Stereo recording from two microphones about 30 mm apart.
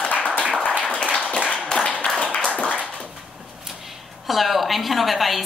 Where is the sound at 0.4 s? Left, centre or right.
Right.